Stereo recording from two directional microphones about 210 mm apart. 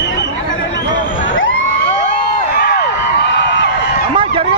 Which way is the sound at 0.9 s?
40° left (ahead or behind).